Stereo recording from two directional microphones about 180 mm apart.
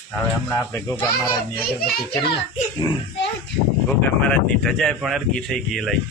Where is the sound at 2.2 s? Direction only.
25° left (ahead or behind).